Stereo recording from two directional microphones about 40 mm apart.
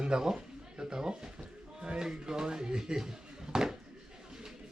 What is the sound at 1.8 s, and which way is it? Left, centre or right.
Speech, right.